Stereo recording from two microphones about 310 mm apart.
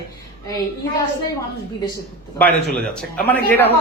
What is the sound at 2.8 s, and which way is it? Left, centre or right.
Speech, centre.